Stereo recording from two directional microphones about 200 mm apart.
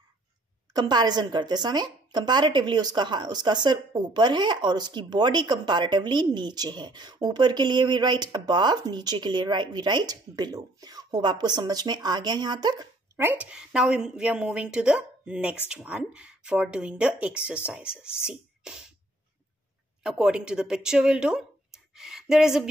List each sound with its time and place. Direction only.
0.7 s a woman's voice: 20° right (ahead or behind); by 18.9 s 5° right (ahead or behind)
20.0 s speech: 5° right (ahead or behind)